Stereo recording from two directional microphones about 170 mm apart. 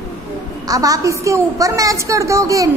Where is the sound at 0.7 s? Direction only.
20° right (ahead or behind).